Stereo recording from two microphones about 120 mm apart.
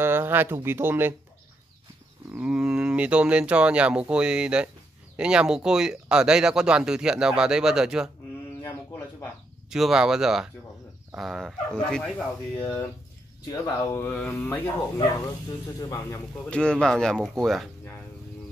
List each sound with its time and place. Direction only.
0.0 s speech: 20° right (ahead or behind)
2.3 s speech: 10° right (ahead or behind)
8.6 s a sound: 15° left (ahead or behind)
9.7 s speech: 5° right (ahead or behind)
12.6 s a man's voice: 20° left (ahead or behind)
13.5 s speech: 30° left (ahead or behind)
14.0 s speech: 15° left (ahead or behind)
15.8 s a man's voice: 25° left (ahead or behind)
16.4 s speech: 5° left (ahead or behind)